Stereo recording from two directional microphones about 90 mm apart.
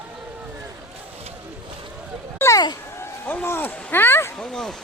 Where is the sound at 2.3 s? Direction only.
30° left (ahead or behind).